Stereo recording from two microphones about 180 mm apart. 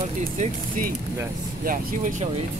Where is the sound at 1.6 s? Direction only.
50° right (ahead or behind).